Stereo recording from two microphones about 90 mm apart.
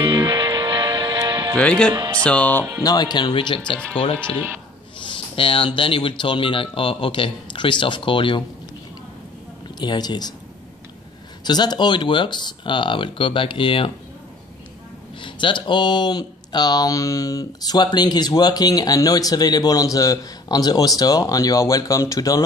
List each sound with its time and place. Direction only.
0.0 s music: 60° right (ahead or behind)
1.6 s music: 10° left (ahead or behind)
2.8 s speech: 50° left (ahead or behind); by 3.8 s 70° left (ahead or behind)
5.0 s speech: 75° left (ahead or behind)
9.8 s speech: 50° left (ahead or behind)
11.4 s speech: 50° left (ahead or behind); by 13.9 s 80° left
15.2 s speech: 65° left (ahead or behind); by 22.4 s 40° left (ahead or behind)